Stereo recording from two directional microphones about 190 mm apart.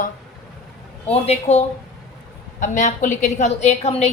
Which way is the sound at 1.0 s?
35° left (ahead or behind).